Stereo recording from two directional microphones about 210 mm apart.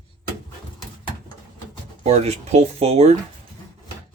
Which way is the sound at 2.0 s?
30° right (ahead or behind).